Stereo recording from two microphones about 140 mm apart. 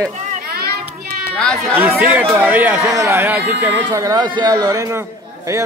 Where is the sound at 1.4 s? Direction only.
5° left (ahead or behind).